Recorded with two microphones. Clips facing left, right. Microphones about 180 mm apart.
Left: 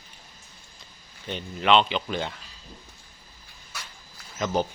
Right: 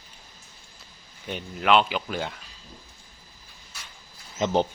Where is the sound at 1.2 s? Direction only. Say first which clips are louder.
Even; 5° right (ahead or behind).